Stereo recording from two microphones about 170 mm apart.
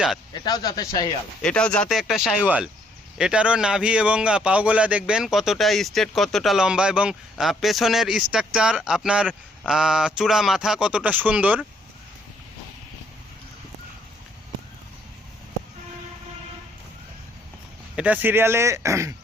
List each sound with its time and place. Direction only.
0.4 s speech: 25° left (ahead or behind)
1.4 s speech: 5° left (ahead or behind)
17.9 s speech: 10° right (ahead or behind)